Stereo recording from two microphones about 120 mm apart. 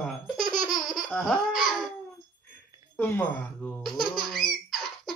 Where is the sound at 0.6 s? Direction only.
Centre (ahead or behind).